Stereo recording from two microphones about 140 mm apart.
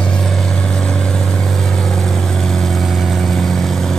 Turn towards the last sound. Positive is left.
turn(degrees=0)  # may be behind; listen again after turning